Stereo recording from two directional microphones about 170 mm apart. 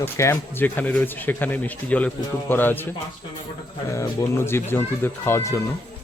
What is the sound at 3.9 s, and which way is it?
Speech, 15° left (ahead or behind).